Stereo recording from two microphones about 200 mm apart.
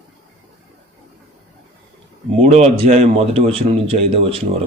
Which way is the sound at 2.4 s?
35° right (ahead or behind).